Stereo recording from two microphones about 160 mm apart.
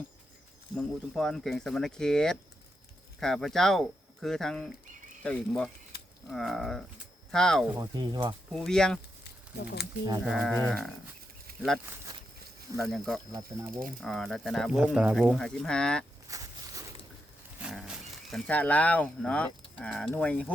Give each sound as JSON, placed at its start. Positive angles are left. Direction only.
{"t": 0.8, "sound": "speech", "side_deg": 5}
{"t": 7.7, "sound": "speech", "side_deg": -25}
{"t": 8.5, "sound": "speech", "side_deg": 5}
{"t": 10.2, "sound": "speech", "side_deg": 0}
{"t": 11.9, "sound": "speech", "side_deg": -15}
{"t": 12.7, "sound": "speech", "side_deg": 0}
{"t": 13.7, "sound": "speech", "side_deg": -60}
{"t": 14.0, "sound": "speech", "side_deg": 5}
{"t": 16.3, "sound": "walk", "side_deg": -20}
{"t": 17.6, "sound": "speech", "side_deg": 0}